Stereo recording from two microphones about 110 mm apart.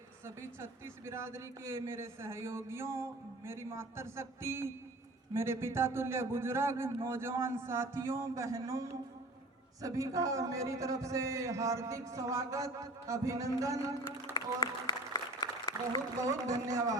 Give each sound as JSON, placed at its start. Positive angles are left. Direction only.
{"t": 0.3, "sound": "a man's voice", "side_deg": -25}
{"t": 14.3, "sound": "applause", "side_deg": 40}
{"t": 16.2, "sound": "a man's voice", "side_deg": -30}